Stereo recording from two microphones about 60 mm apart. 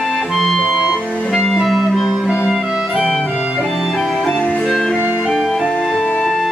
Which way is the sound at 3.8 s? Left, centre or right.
Centre.